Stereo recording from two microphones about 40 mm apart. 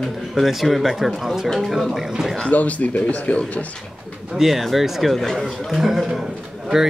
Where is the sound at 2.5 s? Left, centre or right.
Left.